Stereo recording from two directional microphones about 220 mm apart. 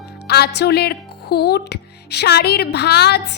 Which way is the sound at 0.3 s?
45° left (ahead or behind).